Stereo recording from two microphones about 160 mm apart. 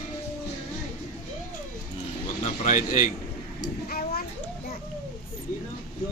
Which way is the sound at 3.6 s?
70° left (ahead or behind).